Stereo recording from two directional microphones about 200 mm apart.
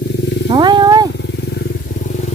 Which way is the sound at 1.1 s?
60° left (ahead or behind).